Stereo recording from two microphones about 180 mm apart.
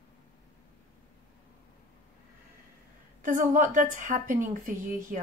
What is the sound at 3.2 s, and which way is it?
Speech, 45° right (ahead or behind).